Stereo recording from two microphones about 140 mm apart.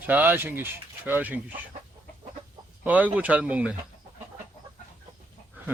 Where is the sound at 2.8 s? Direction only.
10° right (ahead or behind).